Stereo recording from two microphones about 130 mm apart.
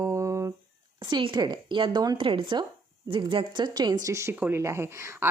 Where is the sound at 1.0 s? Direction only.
35° right (ahead or behind).